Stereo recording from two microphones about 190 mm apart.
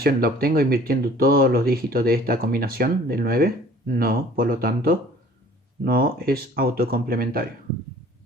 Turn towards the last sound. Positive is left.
turn(degrees=-50)  # may be behind; listen again after turning